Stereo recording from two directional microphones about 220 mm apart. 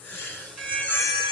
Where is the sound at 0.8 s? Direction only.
10° left (ahead or behind).